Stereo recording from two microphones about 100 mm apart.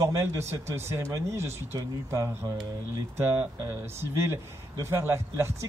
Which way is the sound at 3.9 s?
25° right (ahead or behind).